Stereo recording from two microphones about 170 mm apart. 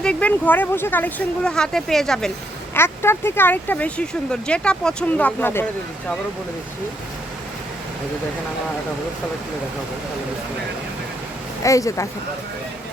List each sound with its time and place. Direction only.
0.0 s speech: 5° left (ahead or behind)
2.7 s speech: 15° left (ahead or behind)
11.6 s speech: 20° left (ahead or behind)